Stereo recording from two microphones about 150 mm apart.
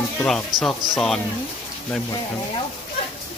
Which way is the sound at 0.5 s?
25° right (ahead or behind).